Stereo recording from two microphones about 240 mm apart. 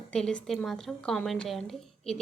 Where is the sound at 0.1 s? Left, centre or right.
Centre.